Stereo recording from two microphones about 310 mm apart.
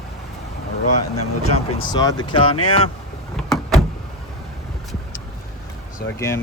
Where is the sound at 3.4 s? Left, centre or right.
Centre.